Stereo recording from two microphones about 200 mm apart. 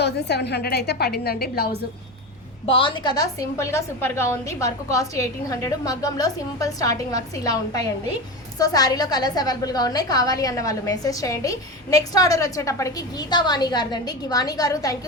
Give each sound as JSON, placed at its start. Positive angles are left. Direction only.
{"t": 0.0, "sound": "a woman's voice", "side_deg": 55}
{"t": 2.6, "sound": "a woman's voice", "side_deg": 25}